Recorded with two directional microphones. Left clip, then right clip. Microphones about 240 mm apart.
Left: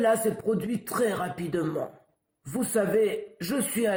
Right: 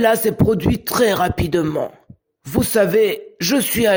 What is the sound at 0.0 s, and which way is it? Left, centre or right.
A man's voice, right.